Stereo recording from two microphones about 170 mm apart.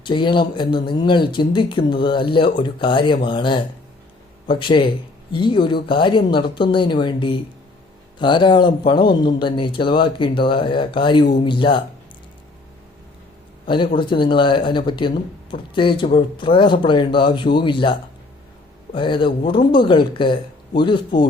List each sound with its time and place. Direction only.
0.0 s speech: 30° left (ahead or behind)
13.7 s speech: 30° left (ahead or behind)
18.9 s speech: 30° left (ahead or behind)